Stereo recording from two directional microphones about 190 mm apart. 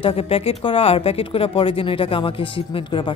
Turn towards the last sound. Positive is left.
turn(degrees=25)  # may be behind; listen again after turning